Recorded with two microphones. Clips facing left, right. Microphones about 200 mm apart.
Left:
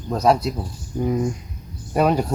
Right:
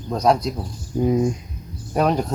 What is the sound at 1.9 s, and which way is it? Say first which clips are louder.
Speech: left 1 dB; 5° left (ahead or behind).